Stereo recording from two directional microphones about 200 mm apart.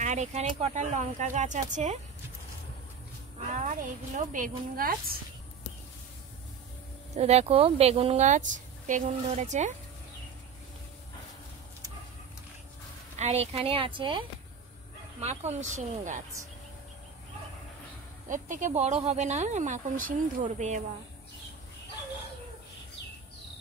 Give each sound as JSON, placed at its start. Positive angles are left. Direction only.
{"t": 0.0, "sound": "a woman's voice", "side_deg": -35}
{"t": 3.6, "sound": "a woman's voice", "side_deg": -40}
{"t": 7.2, "sound": "a woman's voice", "side_deg": -30}
{"t": 13.1, "sound": "a woman's voice", "side_deg": -30}
{"t": 18.3, "sound": "a woman's voice", "side_deg": -40}